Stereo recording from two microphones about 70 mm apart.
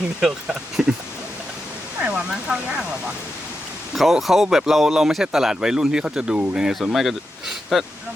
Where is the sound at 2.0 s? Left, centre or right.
Centre.